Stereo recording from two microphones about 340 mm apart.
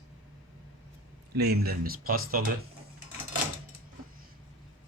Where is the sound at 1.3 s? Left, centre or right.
Right.